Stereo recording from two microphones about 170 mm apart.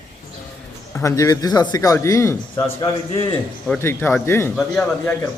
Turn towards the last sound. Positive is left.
turn(degrees=5)  # may be behind; listen again after turning